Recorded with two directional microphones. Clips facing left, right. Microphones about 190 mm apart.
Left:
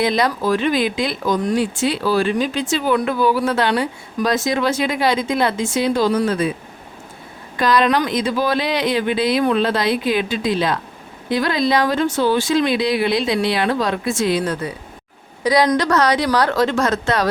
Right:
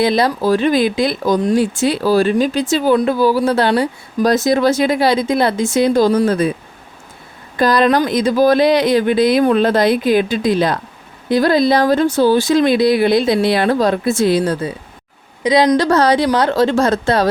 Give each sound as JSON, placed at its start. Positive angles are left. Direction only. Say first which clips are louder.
{"t": 0.0, "sound": "speech", "louder": "right 4 dB", "side_deg": -35}
{"t": 7.6, "sound": "a woman's voice", "louder": "right 3 dB", "side_deg": -40}